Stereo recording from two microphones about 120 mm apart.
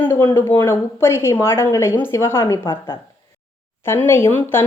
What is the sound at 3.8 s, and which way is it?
Speech, 20° left (ahead or behind).